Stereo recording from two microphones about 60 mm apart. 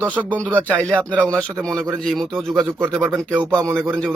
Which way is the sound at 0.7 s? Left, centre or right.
Left.